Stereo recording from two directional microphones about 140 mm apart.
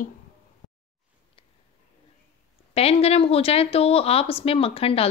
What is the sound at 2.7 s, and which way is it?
Speech, 45° left (ahead or behind).